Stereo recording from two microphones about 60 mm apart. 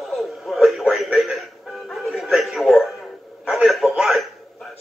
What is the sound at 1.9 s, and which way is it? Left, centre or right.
Music, centre.